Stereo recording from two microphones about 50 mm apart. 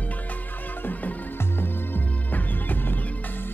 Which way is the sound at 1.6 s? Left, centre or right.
Left.